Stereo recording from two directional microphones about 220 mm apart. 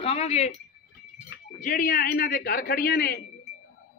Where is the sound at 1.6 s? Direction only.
35° left (ahead or behind).